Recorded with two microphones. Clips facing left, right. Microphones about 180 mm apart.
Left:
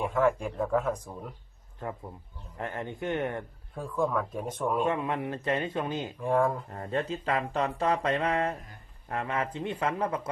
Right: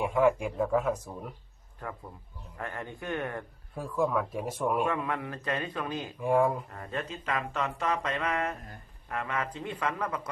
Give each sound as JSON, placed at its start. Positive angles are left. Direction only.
{"t": 0.0, "sound": "speech", "side_deg": -10}
{"t": 1.8, "sound": "speech", "side_deg": 20}
{"t": 3.8, "sound": "speech", "side_deg": -5}
{"t": 4.8, "sound": "speech", "side_deg": 25}
{"t": 6.1, "sound": "speech", "side_deg": -10}
{"t": 6.7, "sound": "speech", "side_deg": 30}